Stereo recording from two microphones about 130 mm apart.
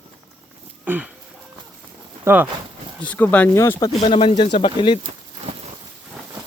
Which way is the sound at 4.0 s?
40° left (ahead or behind).